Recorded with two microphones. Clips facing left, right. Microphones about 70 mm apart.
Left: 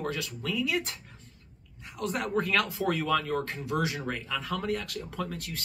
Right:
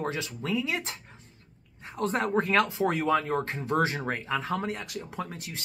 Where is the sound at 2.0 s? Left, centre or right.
Right.